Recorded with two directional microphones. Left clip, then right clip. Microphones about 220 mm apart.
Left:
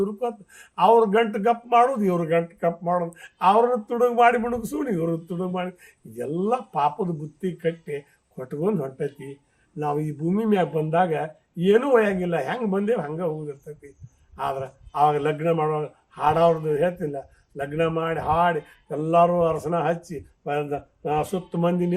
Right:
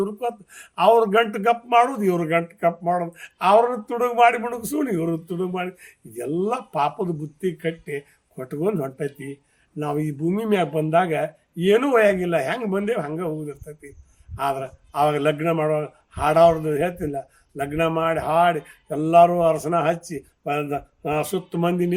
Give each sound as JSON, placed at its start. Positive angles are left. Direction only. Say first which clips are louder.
{"t": 0.0, "sound": "speech", "louder": "right 1 dB", "side_deg": -40}